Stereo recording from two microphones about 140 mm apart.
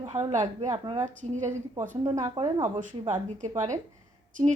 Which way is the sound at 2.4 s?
35° right (ahead or behind).